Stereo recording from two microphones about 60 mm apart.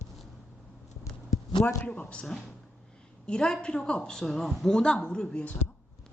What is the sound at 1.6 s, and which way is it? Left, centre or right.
Speech, left.